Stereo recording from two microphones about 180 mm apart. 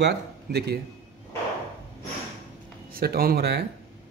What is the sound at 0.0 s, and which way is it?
Speech, 65° right (ahead or behind).